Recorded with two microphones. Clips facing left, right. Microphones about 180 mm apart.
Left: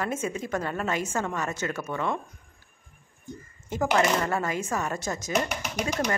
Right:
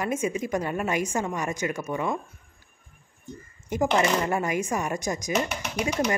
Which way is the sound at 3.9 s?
15° right (ahead or behind).